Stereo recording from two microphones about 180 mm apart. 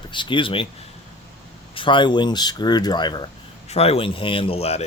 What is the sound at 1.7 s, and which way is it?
Speech, 25° left (ahead or behind).